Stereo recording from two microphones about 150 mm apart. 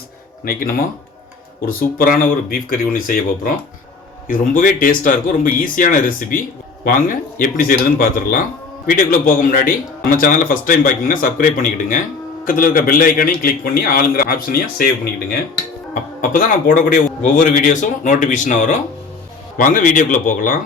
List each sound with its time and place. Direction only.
0.4 s a man's voice: 75° left (ahead or behind)
16.2 s a man's voice: 65° left (ahead or behind)